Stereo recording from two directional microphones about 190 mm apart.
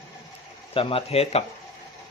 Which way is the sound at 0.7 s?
30° left (ahead or behind).